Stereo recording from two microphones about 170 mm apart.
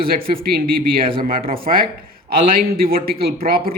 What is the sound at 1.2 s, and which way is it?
A man's voice, 55° right (ahead or behind).